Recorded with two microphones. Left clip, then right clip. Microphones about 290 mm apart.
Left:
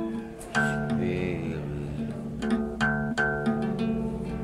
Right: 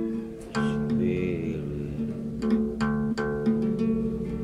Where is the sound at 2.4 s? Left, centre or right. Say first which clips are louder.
Left 1 dB; centre.